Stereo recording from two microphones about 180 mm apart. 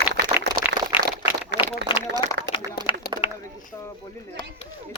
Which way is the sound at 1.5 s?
75° right (ahead or behind).